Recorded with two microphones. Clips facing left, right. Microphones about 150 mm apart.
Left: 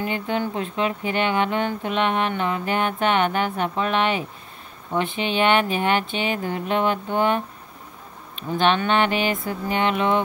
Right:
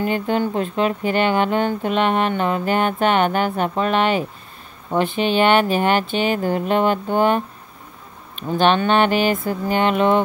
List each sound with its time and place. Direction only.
0.0 s speech: 40° right (ahead or behind)
8.5 s speech: 35° right (ahead or behind)